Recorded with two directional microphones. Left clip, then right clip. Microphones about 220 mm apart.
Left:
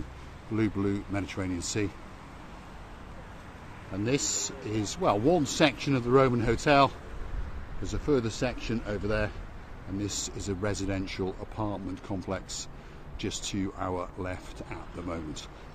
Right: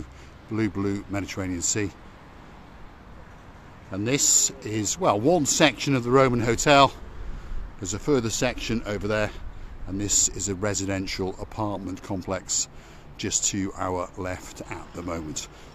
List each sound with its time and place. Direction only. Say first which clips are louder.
0.6 s speech: right 2 dB; 25° right (ahead or behind)
3.9 s speech: right 6 dB; 30° right (ahead or behind)